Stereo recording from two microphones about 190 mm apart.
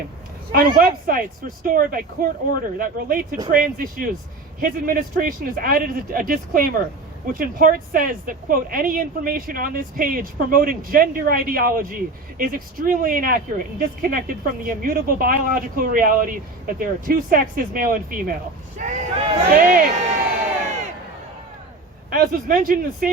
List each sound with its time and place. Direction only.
0.5 s speech: 50° right (ahead or behind)
22.1 s speech: 50° right (ahead or behind)